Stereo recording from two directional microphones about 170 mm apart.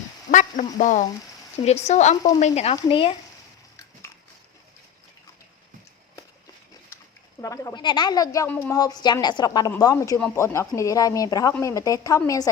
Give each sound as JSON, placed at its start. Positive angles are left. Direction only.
{"t": 0.3, "sound": "frying", "side_deg": 45}
{"t": 1.6, "sound": "a woman's voice", "side_deg": 40}
{"t": 7.4, "sound": "a woman's voice", "side_deg": 20}